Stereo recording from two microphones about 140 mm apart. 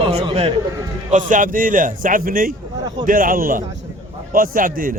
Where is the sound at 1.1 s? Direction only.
65° right (ahead or behind).